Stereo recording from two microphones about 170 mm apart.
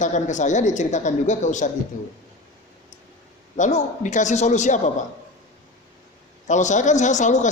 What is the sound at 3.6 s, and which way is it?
A man's voice, 45° left (ahead or behind).